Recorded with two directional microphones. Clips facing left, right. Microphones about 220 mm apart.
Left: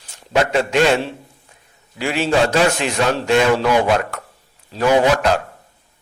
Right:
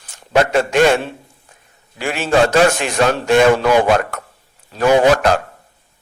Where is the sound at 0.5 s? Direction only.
50° right (ahead or behind).